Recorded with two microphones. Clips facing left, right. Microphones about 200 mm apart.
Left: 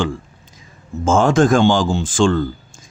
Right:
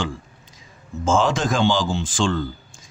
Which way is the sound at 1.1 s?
50° left (ahead or behind).